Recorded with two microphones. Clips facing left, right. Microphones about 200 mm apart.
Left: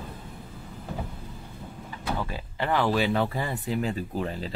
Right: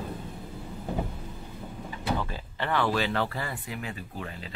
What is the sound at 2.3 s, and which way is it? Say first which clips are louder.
Speech: left 3 dB; 10° left (ahead or behind).